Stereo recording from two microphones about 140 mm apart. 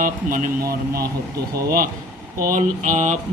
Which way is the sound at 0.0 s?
75° right (ahead or behind).